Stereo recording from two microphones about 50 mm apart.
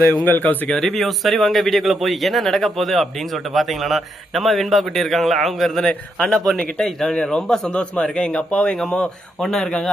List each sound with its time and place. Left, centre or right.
0.3 s a man's voice: left
0.7 s a man's voice: centre; by 8.8 s left
9.4 s speech: centre